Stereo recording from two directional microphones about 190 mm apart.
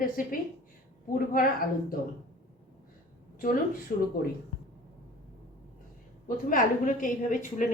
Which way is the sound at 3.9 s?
50° left (ahead or behind).